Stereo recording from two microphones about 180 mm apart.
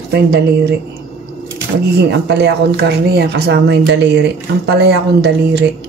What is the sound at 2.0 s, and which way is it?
Speech, 70° right (ahead or behind).